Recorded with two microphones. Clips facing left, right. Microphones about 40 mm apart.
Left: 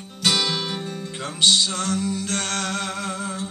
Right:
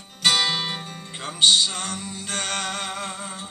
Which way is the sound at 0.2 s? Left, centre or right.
Right.